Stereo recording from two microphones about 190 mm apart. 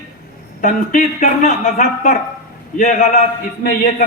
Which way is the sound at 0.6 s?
45° left (ahead or behind).